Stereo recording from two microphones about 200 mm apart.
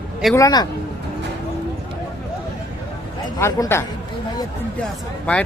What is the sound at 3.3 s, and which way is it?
Speech, 15° left (ahead or behind).